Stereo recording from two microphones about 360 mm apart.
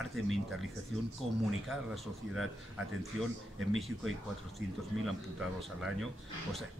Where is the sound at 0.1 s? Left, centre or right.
Centre.